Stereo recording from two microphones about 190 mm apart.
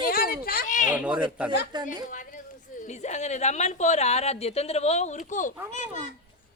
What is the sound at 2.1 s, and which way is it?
A woman's voice, 45° left (ahead or behind).